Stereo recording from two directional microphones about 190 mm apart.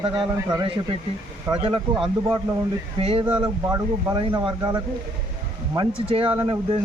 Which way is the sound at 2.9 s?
30° right (ahead or behind).